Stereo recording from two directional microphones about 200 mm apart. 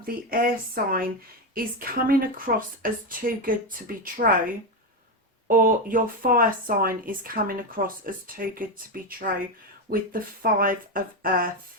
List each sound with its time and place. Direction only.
0.0 s speech: 45° right (ahead or behind)
5.5 s speech: 45° right (ahead or behind)